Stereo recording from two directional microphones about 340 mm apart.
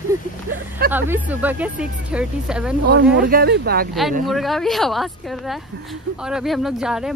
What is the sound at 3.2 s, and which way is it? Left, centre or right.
Speech, right.